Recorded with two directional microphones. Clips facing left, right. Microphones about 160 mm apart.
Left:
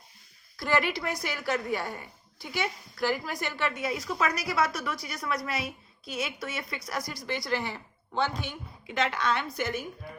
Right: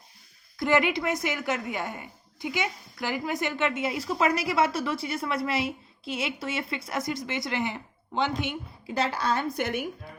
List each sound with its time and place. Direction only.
0.6 s a woman's voice: 20° right (ahead or behind)
8.9 s a woman's voice: 35° right (ahead or behind)
9.6 s speech: 60° right (ahead or behind)